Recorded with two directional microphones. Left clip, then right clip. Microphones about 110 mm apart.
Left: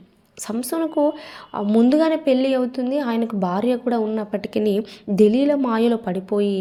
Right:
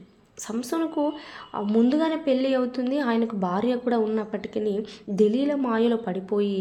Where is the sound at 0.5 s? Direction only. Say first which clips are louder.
Left 5 dB; 25° left (ahead or behind).